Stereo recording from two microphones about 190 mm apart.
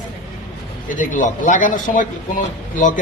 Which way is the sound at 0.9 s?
45° left (ahead or behind).